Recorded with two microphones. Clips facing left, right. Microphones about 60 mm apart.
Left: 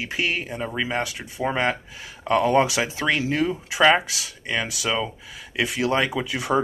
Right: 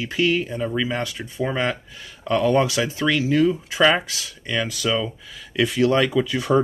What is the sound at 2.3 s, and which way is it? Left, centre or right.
Speech, left.